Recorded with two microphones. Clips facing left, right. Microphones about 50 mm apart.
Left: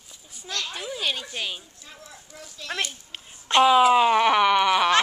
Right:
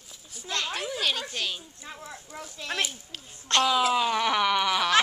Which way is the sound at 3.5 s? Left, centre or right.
Centre.